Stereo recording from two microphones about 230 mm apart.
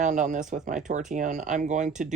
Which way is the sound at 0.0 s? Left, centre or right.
Right.